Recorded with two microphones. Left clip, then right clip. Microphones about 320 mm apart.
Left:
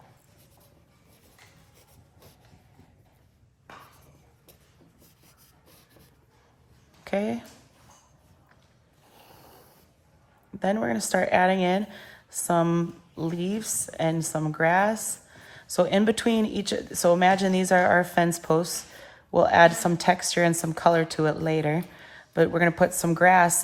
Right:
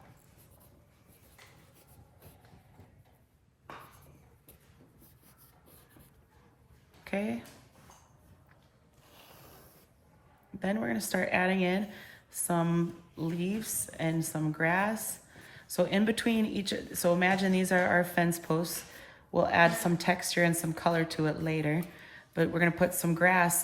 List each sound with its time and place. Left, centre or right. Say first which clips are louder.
7.0 s a woman's voice: left 7 dB; centre
9.0 s boat: left 3 dB; centre
10.6 s speech: left 7 dB; centre